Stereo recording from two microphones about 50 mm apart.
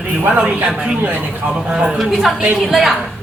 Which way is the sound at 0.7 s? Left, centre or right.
Right.